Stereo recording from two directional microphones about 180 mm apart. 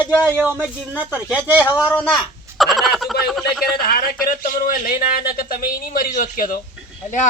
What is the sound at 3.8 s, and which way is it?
A man's voice, 55° left (ahead or behind).